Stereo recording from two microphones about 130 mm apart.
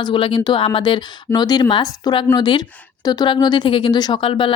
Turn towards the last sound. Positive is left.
turn(degrees=40)  # may be behind; listen again after turning